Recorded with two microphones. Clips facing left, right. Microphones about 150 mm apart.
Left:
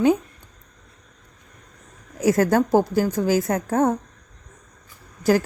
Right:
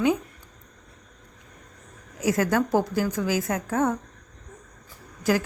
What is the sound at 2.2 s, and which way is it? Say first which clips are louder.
Speech: left 5 dB; 40° left (ahead or behind).